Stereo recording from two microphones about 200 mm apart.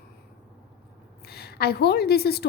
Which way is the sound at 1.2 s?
50° left (ahead or behind).